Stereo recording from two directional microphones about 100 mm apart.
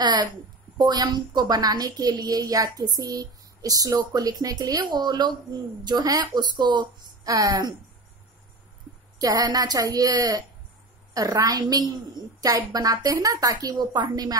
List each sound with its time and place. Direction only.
0.0 s a woman's voice: 45° right (ahead or behind)
9.2 s a woman's voice: 40° right (ahead or behind)